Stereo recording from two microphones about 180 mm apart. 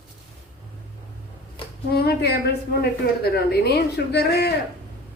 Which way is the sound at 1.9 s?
60° left (ahead or behind).